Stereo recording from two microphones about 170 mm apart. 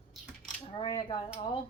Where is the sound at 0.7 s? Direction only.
30° left (ahead or behind).